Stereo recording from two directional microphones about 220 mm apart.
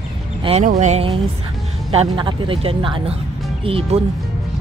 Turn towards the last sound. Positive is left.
turn(degrees=-25)  # may be behind; listen again after turning